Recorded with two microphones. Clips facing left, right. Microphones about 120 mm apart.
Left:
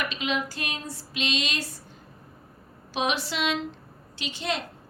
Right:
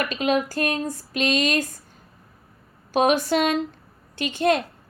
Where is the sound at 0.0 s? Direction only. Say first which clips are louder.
Right 7 dB; 45° right (ahead or behind).